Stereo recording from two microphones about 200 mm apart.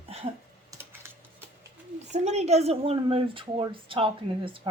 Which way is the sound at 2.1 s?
35° right (ahead or behind).